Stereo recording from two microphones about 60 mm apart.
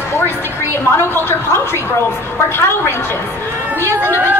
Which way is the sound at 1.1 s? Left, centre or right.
Left.